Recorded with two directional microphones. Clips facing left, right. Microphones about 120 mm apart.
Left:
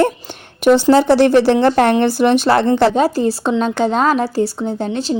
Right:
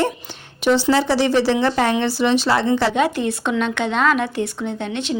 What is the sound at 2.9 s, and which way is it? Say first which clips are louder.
A woman's voice: left 4 dB; 35° left (ahead or behind).